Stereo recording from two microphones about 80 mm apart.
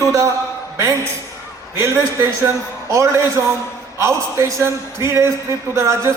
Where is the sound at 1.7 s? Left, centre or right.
Right.